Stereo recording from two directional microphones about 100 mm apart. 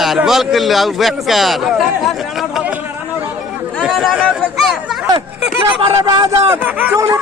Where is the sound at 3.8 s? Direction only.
5° right (ahead or behind).